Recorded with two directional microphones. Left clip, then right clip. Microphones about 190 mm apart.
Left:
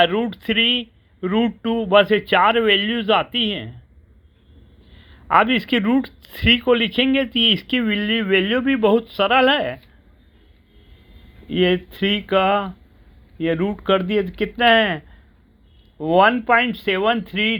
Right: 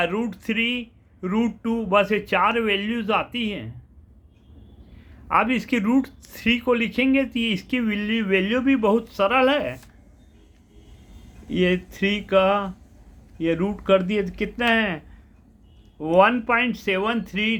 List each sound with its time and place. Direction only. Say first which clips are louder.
0.0 s speech: left 7 dB; 25° left (ahead or behind)
5.3 s speech: left 5 dB; 25° left (ahead or behind)
11.4 s speech: left 4 dB; 20° left (ahead or behind)